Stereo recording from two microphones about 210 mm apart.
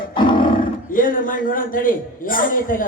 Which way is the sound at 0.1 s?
20° left (ahead or behind).